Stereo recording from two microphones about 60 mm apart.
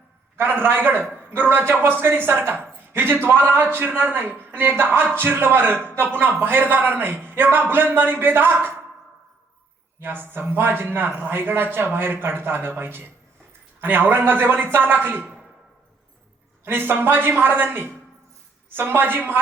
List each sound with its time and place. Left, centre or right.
0.3 s speech: right
10.0 s speech: right
16.6 s speech: right